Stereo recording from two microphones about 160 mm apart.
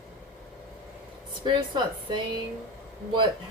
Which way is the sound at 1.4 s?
30° right (ahead or behind).